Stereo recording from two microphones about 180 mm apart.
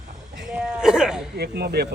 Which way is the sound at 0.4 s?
5° right (ahead or behind).